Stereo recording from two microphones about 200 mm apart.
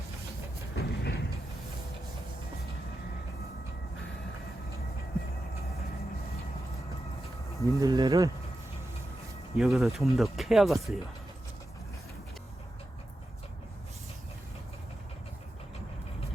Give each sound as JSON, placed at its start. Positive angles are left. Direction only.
{"t": 0.8, "sound": "a sound", "side_deg": 55}
{"t": 7.6, "sound": "speech", "side_deg": -20}
{"t": 9.6, "sound": "speech", "side_deg": 0}